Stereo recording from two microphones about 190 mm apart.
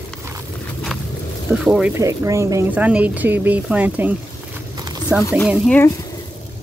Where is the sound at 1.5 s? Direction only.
5° right (ahead or behind).